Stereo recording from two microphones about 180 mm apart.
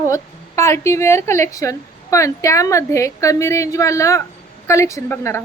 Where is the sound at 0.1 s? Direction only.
15° left (ahead or behind).